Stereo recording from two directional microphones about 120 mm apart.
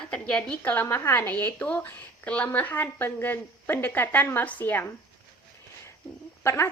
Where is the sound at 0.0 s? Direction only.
10° left (ahead or behind).